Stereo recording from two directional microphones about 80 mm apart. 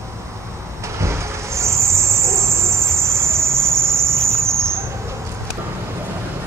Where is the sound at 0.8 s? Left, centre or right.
Right.